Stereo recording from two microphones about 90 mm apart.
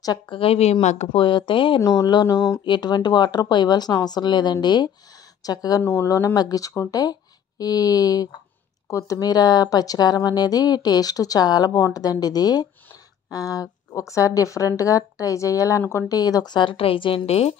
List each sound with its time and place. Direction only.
0.3 s speech: 90° left; by 1.8 s 65° left (ahead or behind)
1.8 s a woman's voice: 40° left (ahead or behind)
2.6 s a woman's voice: 55° left (ahead or behind)
5.8 s a woman's voice: 25° left (ahead or behind); by 17.2 s 90° left